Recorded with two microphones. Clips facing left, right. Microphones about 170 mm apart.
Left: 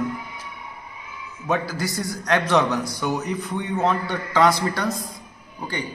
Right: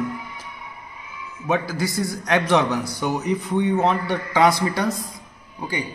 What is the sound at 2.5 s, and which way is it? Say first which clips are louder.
A man's voice: right 1 dB; 20° right (ahead or behind).